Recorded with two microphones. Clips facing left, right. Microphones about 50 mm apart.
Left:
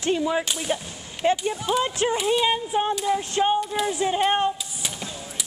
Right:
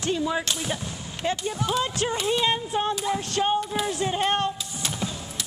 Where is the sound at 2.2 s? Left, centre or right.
Centre.